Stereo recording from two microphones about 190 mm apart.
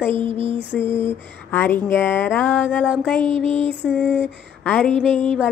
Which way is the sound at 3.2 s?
30° right (ahead or behind).